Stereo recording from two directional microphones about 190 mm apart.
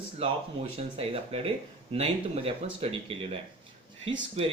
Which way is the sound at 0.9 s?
30° right (ahead or behind).